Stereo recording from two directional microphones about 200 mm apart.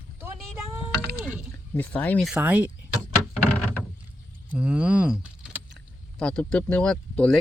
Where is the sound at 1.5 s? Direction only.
5° left (ahead or behind); by 2.7 s 10° right (ahead or behind).